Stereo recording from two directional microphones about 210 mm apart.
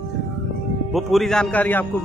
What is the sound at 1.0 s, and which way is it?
Speech, centre (ahead or behind).